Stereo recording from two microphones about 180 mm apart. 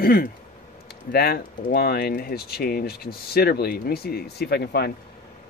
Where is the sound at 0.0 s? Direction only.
55° left (ahead or behind).